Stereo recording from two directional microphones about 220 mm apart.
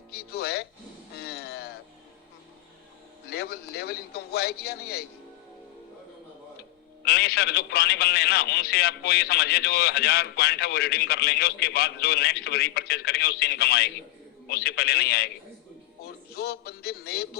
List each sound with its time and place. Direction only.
0.1 s a man's voice: 45° left (ahead or behind)
1.2 s a sound: 45° left (ahead or behind)
3.2 s a man's voice: 45° left (ahead or behind)
7.0 s a man's voice: 45° left (ahead or behind)